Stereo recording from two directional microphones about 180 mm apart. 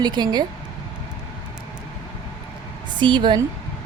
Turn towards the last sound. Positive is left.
turn(degrees=-25)  # may be behind; listen again after turning